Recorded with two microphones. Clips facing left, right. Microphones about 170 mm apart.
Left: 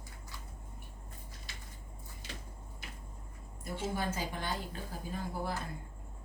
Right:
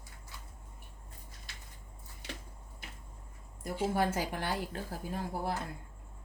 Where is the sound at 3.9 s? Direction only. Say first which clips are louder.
Right 5 dB; 75° right (ahead or behind).